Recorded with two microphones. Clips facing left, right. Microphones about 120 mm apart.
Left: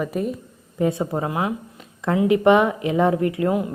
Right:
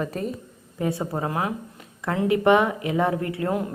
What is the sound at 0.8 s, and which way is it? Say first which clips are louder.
A woman's voice: left 4 dB; 20° left (ahead or behind).